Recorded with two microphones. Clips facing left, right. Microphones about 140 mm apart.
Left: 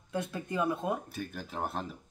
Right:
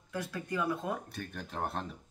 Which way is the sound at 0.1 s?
20° left (ahead or behind).